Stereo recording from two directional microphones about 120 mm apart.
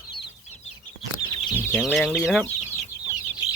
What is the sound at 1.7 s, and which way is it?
Speech, 5° right (ahead or behind).